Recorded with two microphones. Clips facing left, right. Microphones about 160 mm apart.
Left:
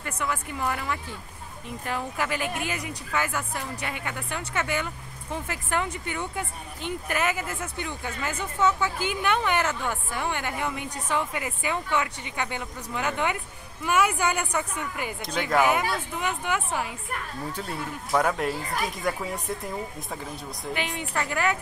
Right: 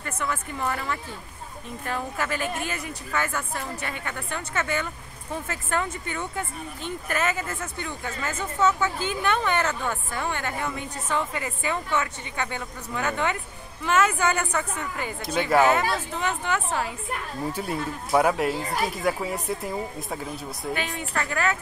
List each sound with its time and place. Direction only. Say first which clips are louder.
0.0 s speech: even; 10° left (ahead or behind)
17.5 s speech: right 5 dB; 10° right (ahead or behind)
20.7 s speech: even; 20° left (ahead or behind)